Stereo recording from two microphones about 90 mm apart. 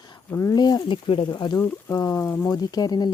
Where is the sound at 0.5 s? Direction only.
50° left (ahead or behind).